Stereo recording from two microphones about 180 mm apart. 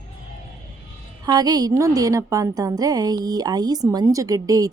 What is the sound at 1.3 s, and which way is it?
A woman's voice, 20° right (ahead or behind).